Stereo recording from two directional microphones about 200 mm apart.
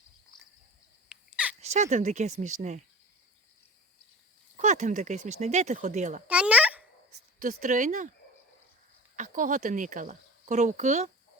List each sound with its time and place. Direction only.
1.1 s a sound: 5° right (ahead or behind)
1.6 s speech: 35° right (ahead or behind)
4.5 s speech: 35° right (ahead or behind)
6.2 s a sound: 5° right (ahead or behind)
7.3 s speech: 40° right (ahead or behind)
9.1 s speech: 40° right (ahead or behind)